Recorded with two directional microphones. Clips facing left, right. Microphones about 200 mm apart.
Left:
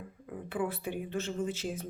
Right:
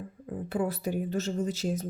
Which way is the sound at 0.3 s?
40° right (ahead or behind).